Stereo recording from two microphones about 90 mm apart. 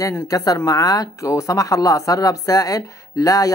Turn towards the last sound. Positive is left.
turn(degrees=40)  # may be behind; listen again after turning